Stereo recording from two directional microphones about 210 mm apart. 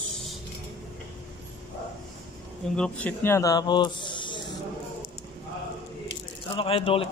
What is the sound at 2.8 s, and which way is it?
Speech, 5° left (ahead or behind).